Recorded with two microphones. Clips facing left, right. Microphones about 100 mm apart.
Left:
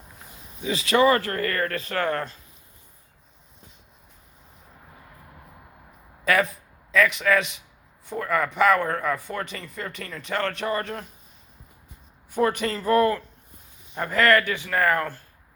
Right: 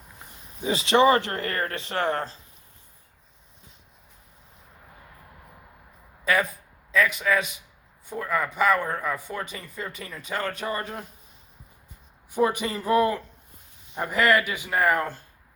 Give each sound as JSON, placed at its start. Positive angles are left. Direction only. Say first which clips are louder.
{"t": 0.6, "sound": "speech", "louder": "right 1 dB", "side_deg": -30}
{"t": 6.2, "sound": "a sound", "louder": "left 2 dB", "side_deg": 0}
{"t": 6.9, "sound": "a man's voice", "louder": "left 2 dB", "side_deg": -5}
{"t": 12.3, "sound": "a man's voice", "louder": "left 1 dB", "side_deg": -15}